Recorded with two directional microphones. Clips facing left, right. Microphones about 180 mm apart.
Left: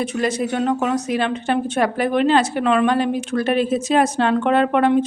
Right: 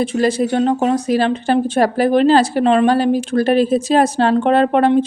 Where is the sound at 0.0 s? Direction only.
30° right (ahead or behind).